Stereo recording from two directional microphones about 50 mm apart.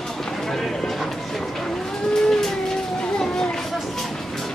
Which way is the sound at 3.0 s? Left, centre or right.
Centre.